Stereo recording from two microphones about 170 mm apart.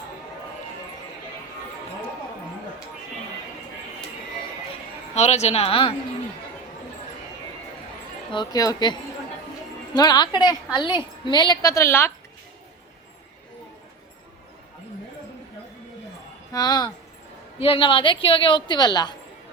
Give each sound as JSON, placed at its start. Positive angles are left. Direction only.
{"t": 5.1, "sound": "speech", "side_deg": 40}
{"t": 8.3, "sound": "a woman's voice", "side_deg": 25}
{"t": 16.5, "sound": "a woman's voice", "side_deg": 20}